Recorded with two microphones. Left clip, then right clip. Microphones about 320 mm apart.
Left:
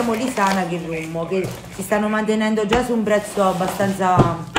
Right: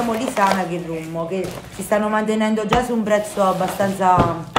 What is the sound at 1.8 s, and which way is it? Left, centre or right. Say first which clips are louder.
A woman's voice: right 1 dB; centre.